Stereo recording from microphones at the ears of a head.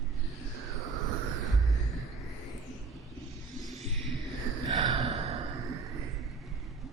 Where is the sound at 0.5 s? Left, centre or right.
Right.